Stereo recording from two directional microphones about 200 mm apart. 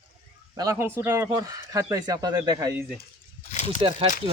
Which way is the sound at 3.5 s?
35° left (ahead or behind).